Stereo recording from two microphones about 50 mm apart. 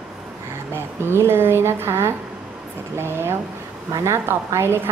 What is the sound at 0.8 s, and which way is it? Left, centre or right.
A woman's voice, right.